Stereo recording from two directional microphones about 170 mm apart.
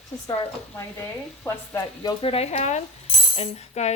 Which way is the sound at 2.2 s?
35° left (ahead or behind).